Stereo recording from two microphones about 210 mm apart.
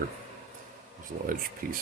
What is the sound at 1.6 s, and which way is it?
Speech, 45° right (ahead or behind).